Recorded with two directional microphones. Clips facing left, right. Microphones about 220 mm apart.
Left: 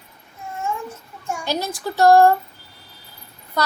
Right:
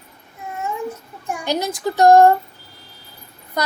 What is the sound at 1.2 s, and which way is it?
A child's voice, 15° right (ahead or behind).